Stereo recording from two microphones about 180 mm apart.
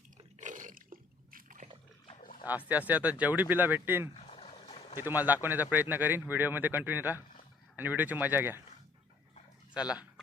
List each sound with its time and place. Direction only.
0.3 s a sound: 45° right (ahead or behind)
2.5 s speech: 10° right (ahead or behind)
4.1 s boat: 35° left (ahead or behind)
4.9 s speech: 10° right (ahead or behind)
9.7 s speech: 5° right (ahead or behind)